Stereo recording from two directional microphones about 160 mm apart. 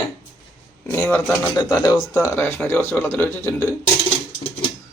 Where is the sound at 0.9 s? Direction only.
15° left (ahead or behind).